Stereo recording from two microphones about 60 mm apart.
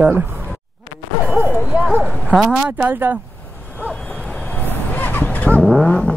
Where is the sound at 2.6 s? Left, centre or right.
Right.